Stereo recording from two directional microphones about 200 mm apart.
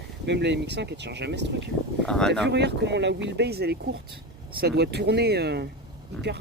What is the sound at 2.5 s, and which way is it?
Speech, 60° right (ahead or behind).